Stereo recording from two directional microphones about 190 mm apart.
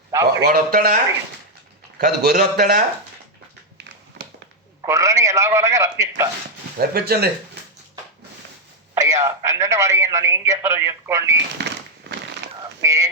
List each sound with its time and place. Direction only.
0.1 s a man's voice: 15° right (ahead or behind)
0.4 s a man's voice: 50° right (ahead or behind)
2.0 s a man's voice: 55° right (ahead or behind)
4.9 s a man's voice: 15° right (ahead or behind)
6.7 s speech: 55° right (ahead or behind)
9.0 s a man's voice: 15° right (ahead or behind)
11.6 s a sound: 65° right (ahead or behind)
12.8 s a man's voice: 15° right (ahead or behind)